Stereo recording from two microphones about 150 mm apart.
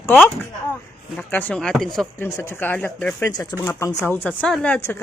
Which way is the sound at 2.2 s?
15° left (ahead or behind).